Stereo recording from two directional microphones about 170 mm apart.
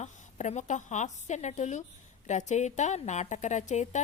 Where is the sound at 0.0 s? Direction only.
45° left (ahead or behind).